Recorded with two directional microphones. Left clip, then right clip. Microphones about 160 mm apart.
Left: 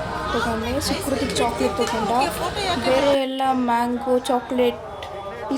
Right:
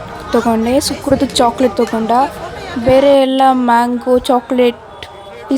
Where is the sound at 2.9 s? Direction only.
55° right (ahead or behind).